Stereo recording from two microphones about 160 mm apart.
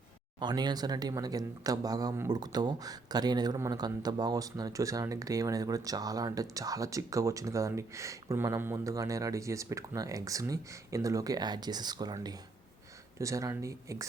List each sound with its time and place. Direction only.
0.3 s speech: 25° right (ahead or behind)